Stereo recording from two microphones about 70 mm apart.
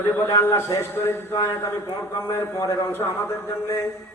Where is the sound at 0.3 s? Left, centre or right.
Left.